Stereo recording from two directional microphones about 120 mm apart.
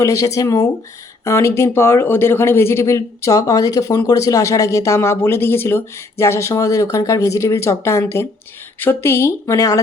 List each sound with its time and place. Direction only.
0.0 s speech: 25° left (ahead or behind)